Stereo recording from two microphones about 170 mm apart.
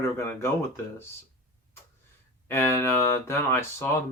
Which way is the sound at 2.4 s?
15° left (ahead or behind).